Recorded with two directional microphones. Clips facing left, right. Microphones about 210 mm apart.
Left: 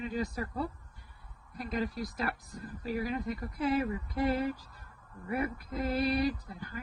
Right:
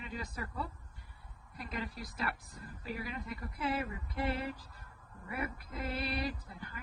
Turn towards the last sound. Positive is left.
turn(degrees=40)  # may be behind; listen again after turning